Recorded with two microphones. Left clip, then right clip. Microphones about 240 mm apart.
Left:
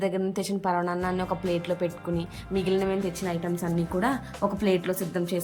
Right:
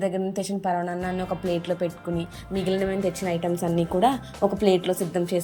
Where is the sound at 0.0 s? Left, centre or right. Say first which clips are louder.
Right 1 dB; centre.